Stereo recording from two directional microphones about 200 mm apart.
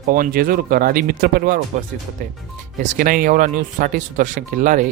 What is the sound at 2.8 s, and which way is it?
Speech, 45° right (ahead or behind).